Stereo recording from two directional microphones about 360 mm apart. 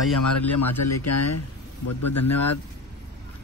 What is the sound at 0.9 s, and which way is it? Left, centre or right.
Speech, left.